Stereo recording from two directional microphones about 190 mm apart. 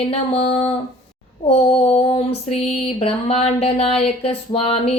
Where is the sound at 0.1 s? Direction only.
30° left (ahead or behind).